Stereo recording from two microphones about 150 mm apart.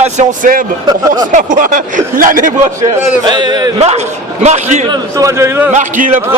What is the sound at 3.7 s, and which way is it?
Speech, 45° right (ahead or behind).